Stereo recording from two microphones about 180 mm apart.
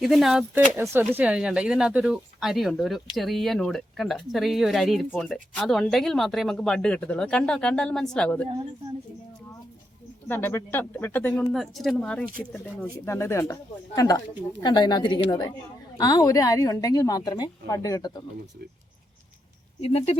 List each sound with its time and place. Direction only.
0.0 s speech: centre (ahead or behind)
10.2 s a woman's voice: 10° left (ahead or behind)
19.8 s speech: 35° left (ahead or behind)